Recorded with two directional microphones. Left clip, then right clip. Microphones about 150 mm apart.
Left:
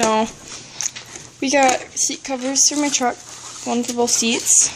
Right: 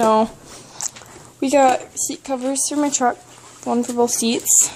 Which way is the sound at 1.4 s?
15° right (ahead or behind).